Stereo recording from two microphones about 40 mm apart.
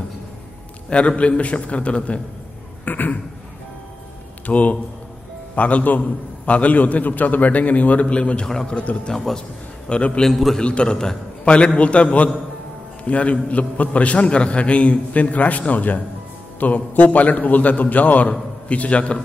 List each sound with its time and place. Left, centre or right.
0.8 s a man's voice: left
2.8 s a sound: left
4.5 s a man's voice: left
9.1 s a man's voice: centre
9.8 s a man's voice: left
10.2 s a man's voice: centre
10.6 s a man's voice: left